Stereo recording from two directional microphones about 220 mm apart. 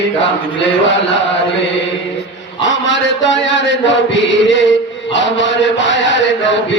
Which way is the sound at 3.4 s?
55° left (ahead or behind).